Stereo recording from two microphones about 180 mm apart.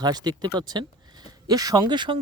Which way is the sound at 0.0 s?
20° right (ahead or behind).